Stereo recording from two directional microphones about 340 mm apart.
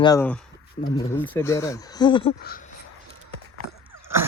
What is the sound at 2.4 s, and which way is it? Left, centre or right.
Speech, left.